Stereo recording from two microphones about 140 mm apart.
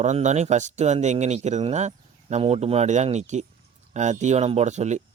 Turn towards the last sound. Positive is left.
turn(degrees=-55)  # may be behind; listen again after turning